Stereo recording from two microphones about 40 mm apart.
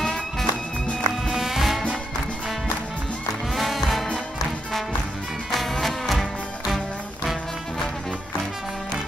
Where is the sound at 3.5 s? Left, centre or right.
Centre.